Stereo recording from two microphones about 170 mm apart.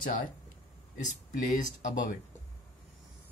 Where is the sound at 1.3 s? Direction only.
50° left (ahead or behind).